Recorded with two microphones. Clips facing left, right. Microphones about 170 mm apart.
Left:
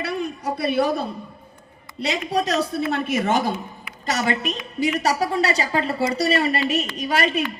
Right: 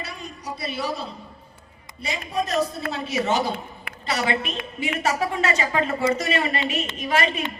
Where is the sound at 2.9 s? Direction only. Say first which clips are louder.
Left 3 dB; 55° left (ahead or behind).